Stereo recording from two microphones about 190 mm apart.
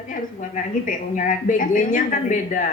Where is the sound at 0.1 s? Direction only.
45° left (ahead or behind).